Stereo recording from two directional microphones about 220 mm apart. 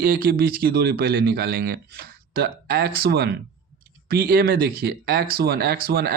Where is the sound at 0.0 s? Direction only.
45° right (ahead or behind).